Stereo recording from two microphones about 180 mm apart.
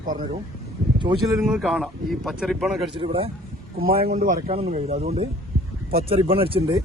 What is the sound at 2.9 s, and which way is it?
Speech, 30° right (ahead or behind).